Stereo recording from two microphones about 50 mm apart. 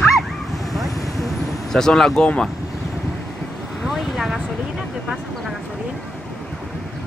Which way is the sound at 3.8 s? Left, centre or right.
Centre.